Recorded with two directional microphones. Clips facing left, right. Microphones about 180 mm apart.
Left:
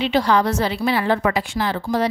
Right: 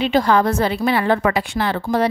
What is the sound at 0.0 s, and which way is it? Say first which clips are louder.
A woman's voice: right 2 dB; 50° right (ahead or behind).